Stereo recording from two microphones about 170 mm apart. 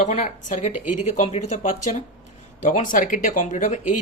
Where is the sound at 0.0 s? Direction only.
45° left (ahead or behind).